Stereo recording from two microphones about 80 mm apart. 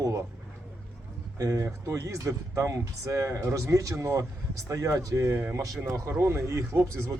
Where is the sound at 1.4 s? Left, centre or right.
Right.